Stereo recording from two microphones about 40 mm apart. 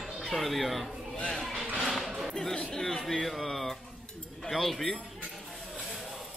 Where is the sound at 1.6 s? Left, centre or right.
Right.